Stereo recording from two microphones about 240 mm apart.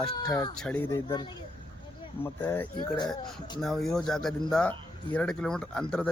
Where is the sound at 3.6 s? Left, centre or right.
Centre.